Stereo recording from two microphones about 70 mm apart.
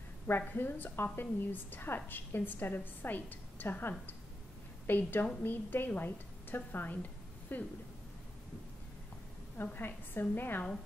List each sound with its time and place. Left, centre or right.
0.5 s a woman's voice: left
9.6 s a woman's voice: left